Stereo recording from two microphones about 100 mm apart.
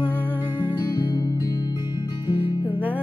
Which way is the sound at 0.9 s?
45° left (ahead or behind).